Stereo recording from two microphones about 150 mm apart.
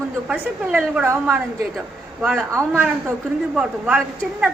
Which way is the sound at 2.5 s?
20° right (ahead or behind).